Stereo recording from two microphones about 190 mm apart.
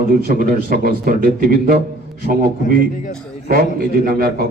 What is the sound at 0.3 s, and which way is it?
A man's voice, 50° right (ahead or behind).